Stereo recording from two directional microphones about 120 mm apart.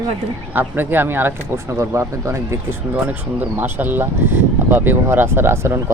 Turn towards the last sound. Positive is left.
turn(degrees=-20)  # may be behind; listen again after turning